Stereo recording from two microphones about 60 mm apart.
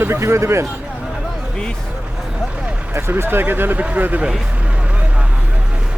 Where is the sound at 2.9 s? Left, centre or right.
Right.